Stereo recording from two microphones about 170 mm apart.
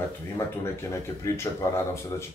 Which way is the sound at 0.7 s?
15° left (ahead or behind).